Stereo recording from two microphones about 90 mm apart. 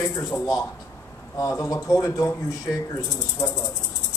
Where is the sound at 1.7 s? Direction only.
35° left (ahead or behind).